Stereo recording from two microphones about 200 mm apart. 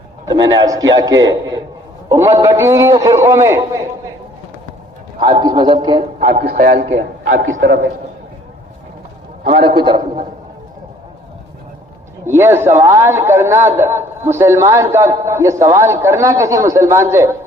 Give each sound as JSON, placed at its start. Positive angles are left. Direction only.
{"t": 0.3, "sound": "a man's voice", "side_deg": -20}
{"t": 5.2, "sound": "a man's voice", "side_deg": -20}
{"t": 6.1, "sound": "a man's voice", "side_deg": -40}
{"t": 7.3, "sound": "a man's voice", "side_deg": -70}
{"t": 9.6, "sound": "a sound", "side_deg": -25}
{"t": 12.2, "sound": "a man's voice", "side_deg": -10}